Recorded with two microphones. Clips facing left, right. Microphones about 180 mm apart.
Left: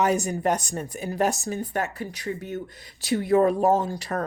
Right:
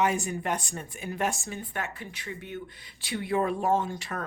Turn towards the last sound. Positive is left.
turn(degrees=40)  # may be behind; listen again after turning